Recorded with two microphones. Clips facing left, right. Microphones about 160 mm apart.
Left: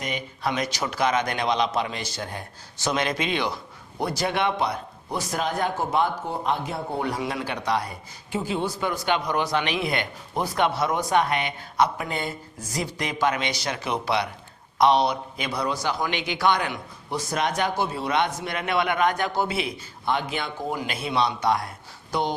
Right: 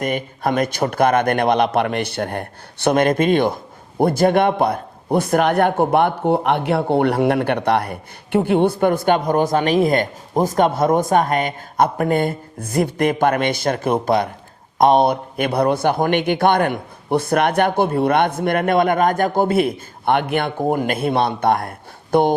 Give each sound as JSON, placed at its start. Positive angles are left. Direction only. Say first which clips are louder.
{"t": 0.0, "sound": "a man's voice", "louder": "right 8 dB", "side_deg": -50}